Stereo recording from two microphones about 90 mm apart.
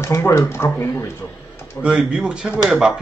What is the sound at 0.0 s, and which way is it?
Speech, 30° left (ahead or behind).